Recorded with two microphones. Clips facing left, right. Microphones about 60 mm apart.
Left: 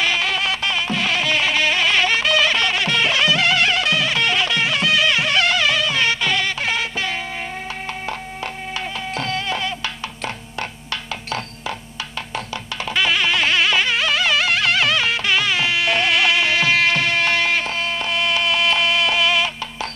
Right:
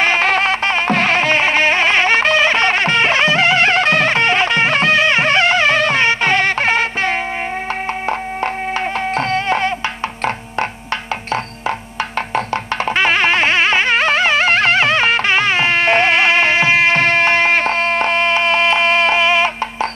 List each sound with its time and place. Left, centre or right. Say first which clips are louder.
0.0 s music: right 6 dB; right
9.1 s a sound: right 6 dB; right
12.9 s music: right 4 dB; right